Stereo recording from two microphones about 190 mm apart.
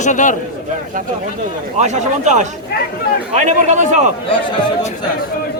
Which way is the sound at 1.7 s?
40° right (ahead or behind).